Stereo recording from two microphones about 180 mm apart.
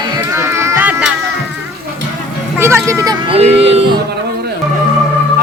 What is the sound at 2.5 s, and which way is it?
Vehicle, 15° right (ahead or behind).